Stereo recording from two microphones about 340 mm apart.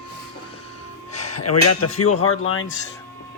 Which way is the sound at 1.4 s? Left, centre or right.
Left.